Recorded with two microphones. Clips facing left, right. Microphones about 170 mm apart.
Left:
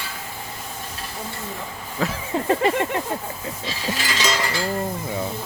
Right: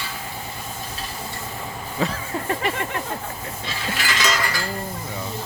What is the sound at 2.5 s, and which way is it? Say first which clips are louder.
Speech: left 6 dB; 30° left (ahead or behind).